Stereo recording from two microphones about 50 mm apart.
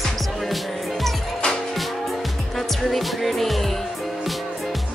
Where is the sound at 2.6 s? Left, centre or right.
Centre.